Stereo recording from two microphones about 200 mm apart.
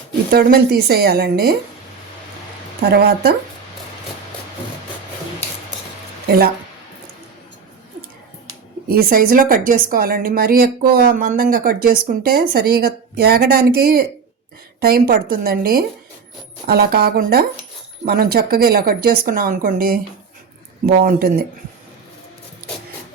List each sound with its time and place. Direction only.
0.3 s a woman's voice: 50° right (ahead or behind)
2.8 s a woman's voice: 50° right (ahead or behind)
6.2 s speech: 50° right (ahead or behind)
8.9 s a woman's voice: 45° right (ahead or behind)